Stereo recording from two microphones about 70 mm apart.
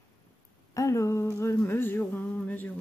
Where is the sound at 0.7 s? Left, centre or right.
Left.